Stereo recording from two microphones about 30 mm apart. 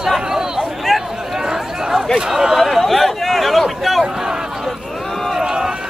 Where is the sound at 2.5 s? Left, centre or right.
Centre.